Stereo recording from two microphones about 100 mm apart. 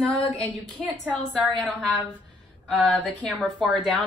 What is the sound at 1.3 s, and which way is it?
A woman's voice, 5° left (ahead or behind).